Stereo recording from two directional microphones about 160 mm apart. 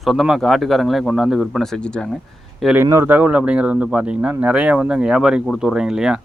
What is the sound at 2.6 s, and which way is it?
Speech, 5° right (ahead or behind).